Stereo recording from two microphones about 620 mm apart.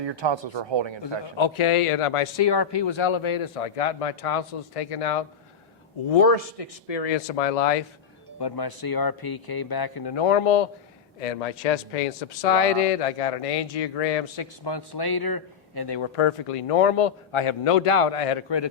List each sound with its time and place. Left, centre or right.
0.0 s speech: right
1.0 s a man's voice: left
8.4 s speech: left
10.2 s a man's voice: left
11.2 s a man's voice: left
14.3 s speech: left
16.1 s a man's voice: left
18.4 s a man's voice: left